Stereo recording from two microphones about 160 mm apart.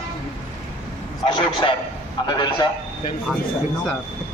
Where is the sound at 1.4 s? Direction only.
30° left (ahead or behind).